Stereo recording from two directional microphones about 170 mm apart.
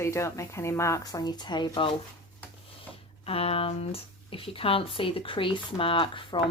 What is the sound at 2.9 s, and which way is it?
Speech, 35° left (ahead or behind).